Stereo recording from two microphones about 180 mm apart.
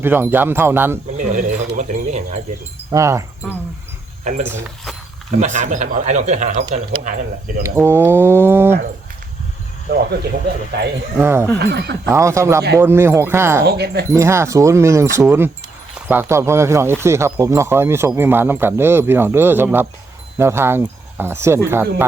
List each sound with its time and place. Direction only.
0.0 s speech: 10° right (ahead or behind)
1.1 s speech: 45° right (ahead or behind)
2.9 s speech: 15° right (ahead or behind)
4.2 s speech: 45° right (ahead or behind)
4.4 s speech: 10° right (ahead or behind)
5.4 s speech: 40° right (ahead or behind)
7.6 s speech: 15° right (ahead or behind)
11.2 s speech: 15° right (ahead or behind)
11.7 s speech: 70° right (ahead or behind)
12.0 s speech: 15° right (ahead or behind)
13.7 s speech: 65° right (ahead or behind)
14.1 s speech: 15° right (ahead or behind)